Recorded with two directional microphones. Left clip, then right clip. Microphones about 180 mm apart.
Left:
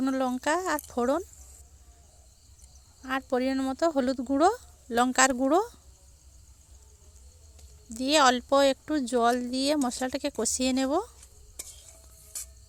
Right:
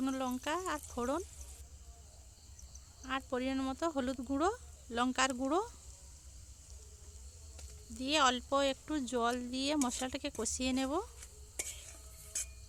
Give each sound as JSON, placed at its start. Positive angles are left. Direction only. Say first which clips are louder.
{"t": 0.0, "sound": "speech", "louder": "left 9 dB", "side_deg": 30}
{"t": 3.0, "sound": "speech", "louder": "left 9 dB", "side_deg": 35}
{"t": 7.9, "sound": "speech", "louder": "left 9 dB", "side_deg": 35}